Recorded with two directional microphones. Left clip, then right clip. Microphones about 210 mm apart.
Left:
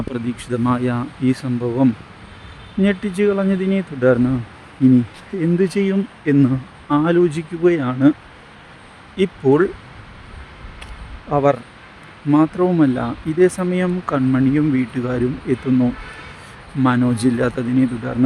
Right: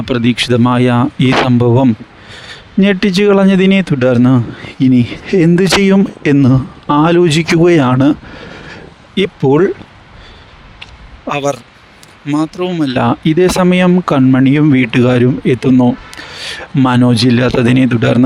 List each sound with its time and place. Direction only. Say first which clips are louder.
0.1 s speech: right 16 dB; 45° right (ahead or behind)
9.1 s speech: right 5 dB; 40° right (ahead or behind)
11.3 s speech: left 2 dB; centre (ahead or behind)
13.0 s speech: right 6 dB; 45° right (ahead or behind)